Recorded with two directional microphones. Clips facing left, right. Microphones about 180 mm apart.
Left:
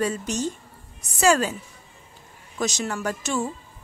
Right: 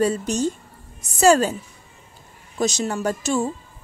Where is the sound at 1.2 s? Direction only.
35° right (ahead or behind).